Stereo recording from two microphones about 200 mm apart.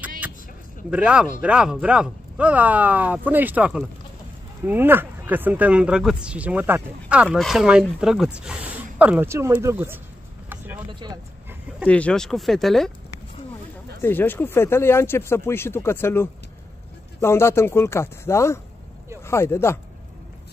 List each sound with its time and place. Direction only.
0.8 s speech: 5° right (ahead or behind)
10.5 s vehicle: 10° right (ahead or behind)
10.9 s vehicle: 20° right (ahead or behind)
11.8 s speech: 5° left (ahead or behind)
14.0 s speech: 10° left (ahead or behind)